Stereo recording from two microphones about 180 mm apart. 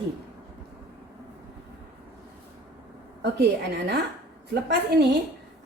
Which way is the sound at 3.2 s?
70° right (ahead or behind).